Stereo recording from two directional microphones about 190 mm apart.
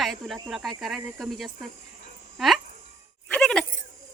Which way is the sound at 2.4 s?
Centre (ahead or behind).